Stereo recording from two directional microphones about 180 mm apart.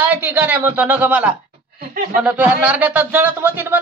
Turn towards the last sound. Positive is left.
turn(degrees=-10)  # may be behind; listen again after turning